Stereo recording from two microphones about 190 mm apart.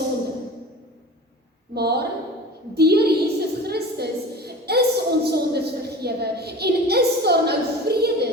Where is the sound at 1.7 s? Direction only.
55° right (ahead or behind).